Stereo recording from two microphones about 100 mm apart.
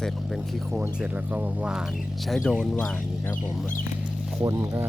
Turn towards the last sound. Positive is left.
turn(degrees=-30)  # may be behind; listen again after turning